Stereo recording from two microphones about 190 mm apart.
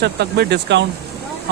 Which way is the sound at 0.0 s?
60° right (ahead or behind).